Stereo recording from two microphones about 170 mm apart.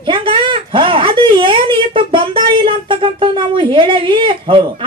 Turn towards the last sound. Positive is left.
turn(degrees=-30)  # may be behind; listen again after turning